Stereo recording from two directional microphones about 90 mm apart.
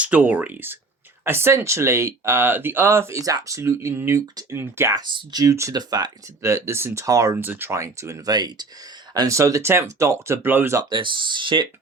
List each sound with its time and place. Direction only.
0.0 s speech: 15° right (ahead or behind)
5.1 s speech: 50° right (ahead or behind)
5.5 s speech: 35° right (ahead or behind)
5.7 s speech: 50° right (ahead or behind)
6.4 s speech: 30° right (ahead or behind)
7.3 s speech: 20° right (ahead or behind); by 8.6 s 50° right (ahead or behind)
9.1 s speech: 35° right (ahead or behind)
10.8 s speech: 65° right (ahead or behind)